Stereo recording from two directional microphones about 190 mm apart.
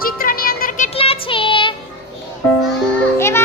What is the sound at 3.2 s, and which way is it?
Music, 15° left (ahead or behind).